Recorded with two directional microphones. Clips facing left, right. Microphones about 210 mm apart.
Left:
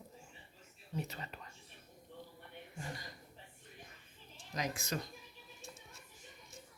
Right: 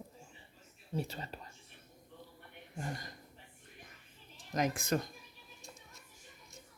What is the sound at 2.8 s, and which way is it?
Speech, 50° right (ahead or behind).